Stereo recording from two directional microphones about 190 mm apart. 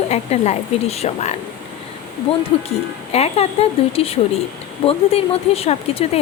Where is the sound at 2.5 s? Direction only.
30° left (ahead or behind).